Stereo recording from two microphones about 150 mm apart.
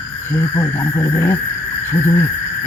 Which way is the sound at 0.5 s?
25° left (ahead or behind).